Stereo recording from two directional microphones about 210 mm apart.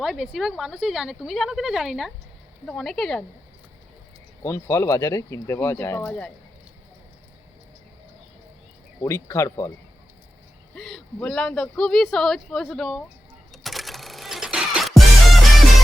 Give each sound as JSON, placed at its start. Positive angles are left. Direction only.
{"t": 0.0, "sound": "speech", "side_deg": 0}
{"t": 4.4, "sound": "speech", "side_deg": 15}
{"t": 9.0, "sound": "speech", "side_deg": 15}
{"t": 10.8, "sound": "speech", "side_deg": 0}
{"t": 13.5, "sound": "music", "side_deg": 0}